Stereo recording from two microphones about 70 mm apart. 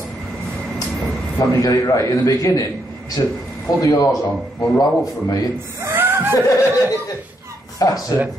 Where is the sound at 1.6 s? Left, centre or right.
Left.